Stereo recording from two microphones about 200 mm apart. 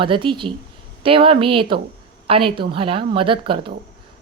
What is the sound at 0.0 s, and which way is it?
A woman's voice, 25° right (ahead or behind).